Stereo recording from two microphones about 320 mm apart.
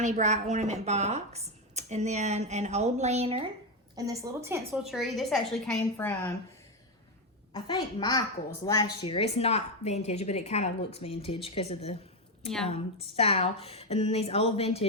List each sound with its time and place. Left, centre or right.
0.0 s a woman's voice: right; by 6.3 s centre
7.5 s a woman's voice: centre